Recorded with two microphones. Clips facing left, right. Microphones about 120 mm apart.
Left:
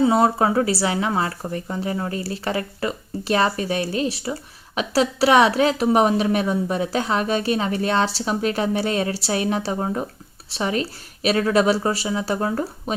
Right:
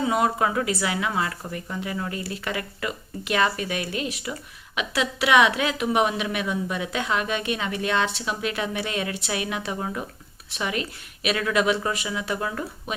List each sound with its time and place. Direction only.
0.0 s speech: 35° left (ahead or behind)